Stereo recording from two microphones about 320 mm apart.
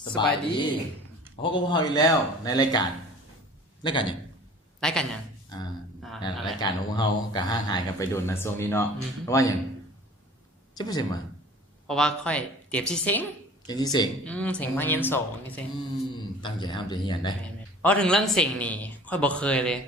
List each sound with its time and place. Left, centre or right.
0.0 s speech: centre
3.8 s speech: centre
4.8 s a man's voice: centre
6.0 s a sound: centre
6.6 s speech: centre
10.8 s speech: centre
11.9 s a man's voice: centre
17.4 s a man's voice: centre